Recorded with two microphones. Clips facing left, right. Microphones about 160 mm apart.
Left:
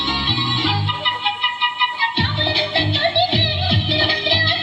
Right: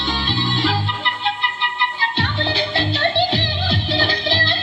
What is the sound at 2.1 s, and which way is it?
Music, 25° left (ahead or behind).